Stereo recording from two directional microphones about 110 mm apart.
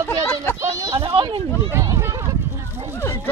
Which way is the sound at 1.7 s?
25° right (ahead or behind).